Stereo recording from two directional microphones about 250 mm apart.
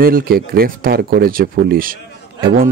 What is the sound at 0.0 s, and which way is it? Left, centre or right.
Speech, right.